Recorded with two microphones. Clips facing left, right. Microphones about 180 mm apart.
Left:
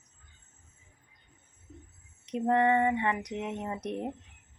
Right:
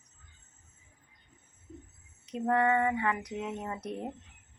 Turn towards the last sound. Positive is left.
turn(degrees=20)  # may be behind; listen again after turning